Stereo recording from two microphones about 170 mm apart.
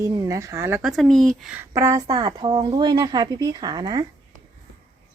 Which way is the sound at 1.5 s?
20° right (ahead or behind).